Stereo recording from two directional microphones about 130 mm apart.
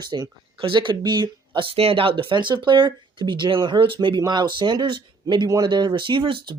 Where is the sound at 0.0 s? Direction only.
30° right (ahead or behind).